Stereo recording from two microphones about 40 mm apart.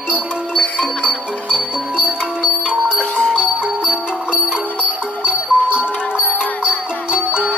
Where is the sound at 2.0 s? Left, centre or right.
Right.